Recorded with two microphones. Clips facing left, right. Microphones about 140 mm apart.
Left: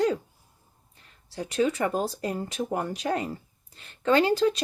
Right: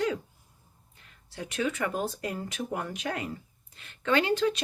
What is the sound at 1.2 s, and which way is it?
Speech, 35° left (ahead or behind).